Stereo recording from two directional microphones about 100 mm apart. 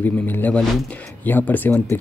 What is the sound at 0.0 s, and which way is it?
Speech, 20° left (ahead or behind).